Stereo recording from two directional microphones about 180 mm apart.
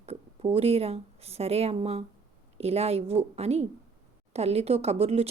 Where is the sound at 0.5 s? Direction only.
35° right (ahead or behind).